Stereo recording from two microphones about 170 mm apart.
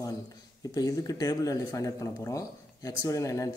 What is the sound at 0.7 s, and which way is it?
Speech, 20° left (ahead or behind).